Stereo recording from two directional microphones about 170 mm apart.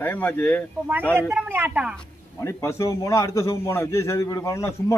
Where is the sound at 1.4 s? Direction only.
10° right (ahead or behind).